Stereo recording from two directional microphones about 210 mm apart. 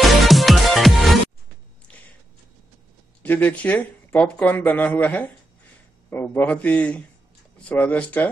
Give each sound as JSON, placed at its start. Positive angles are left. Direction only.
{"t": 0.0, "sound": "music", "side_deg": 0}
{"t": 3.2, "sound": "speech", "side_deg": 10}